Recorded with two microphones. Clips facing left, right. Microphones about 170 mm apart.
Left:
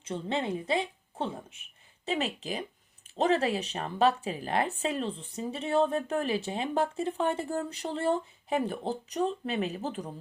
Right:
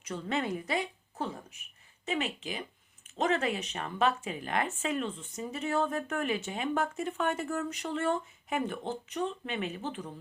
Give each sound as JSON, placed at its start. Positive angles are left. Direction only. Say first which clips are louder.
{"t": 0.0, "sound": "a woman's voice", "louder": "left 1 dB", "side_deg": 25}